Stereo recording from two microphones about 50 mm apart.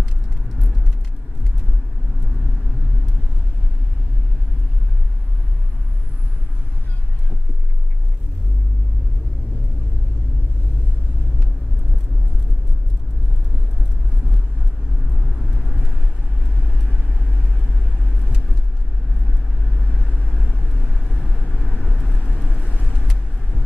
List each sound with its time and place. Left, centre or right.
21.6 s vehicle: left